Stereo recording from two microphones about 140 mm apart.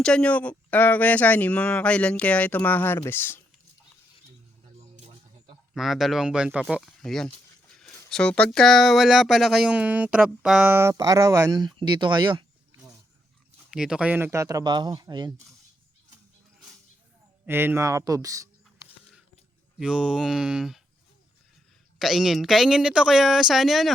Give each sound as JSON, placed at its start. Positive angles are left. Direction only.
{"t": 0.0, "sound": "speech", "side_deg": 5}
{"t": 5.7, "sound": "speech", "side_deg": 0}
{"t": 10.7, "sound": "speech", "side_deg": -20}
{"t": 11.6, "sound": "a sound", "side_deg": -35}
{"t": 13.7, "sound": "speech", "side_deg": -5}
{"t": 17.4, "sound": "speech", "side_deg": -15}
{"t": 19.8, "sound": "speech", "side_deg": -5}
{"t": 21.9, "sound": "speech", "side_deg": 0}